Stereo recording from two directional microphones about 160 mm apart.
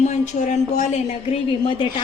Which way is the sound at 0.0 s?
50° left (ahead or behind).